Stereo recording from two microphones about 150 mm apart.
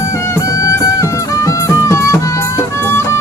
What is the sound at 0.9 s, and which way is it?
Music, 20° left (ahead or behind).